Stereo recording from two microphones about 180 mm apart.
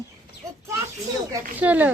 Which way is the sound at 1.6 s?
10° right (ahead or behind).